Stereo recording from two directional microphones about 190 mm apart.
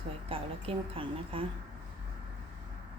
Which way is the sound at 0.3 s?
30° right (ahead or behind).